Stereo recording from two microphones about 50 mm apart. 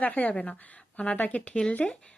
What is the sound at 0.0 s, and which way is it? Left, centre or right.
Speech, left.